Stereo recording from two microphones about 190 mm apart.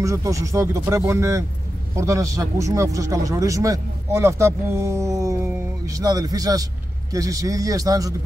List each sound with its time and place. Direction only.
0.0 s speech: 15° right (ahead or behind)